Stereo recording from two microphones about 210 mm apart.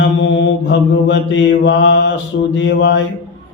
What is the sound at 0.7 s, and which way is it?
Speech, 60° left (ahead or behind).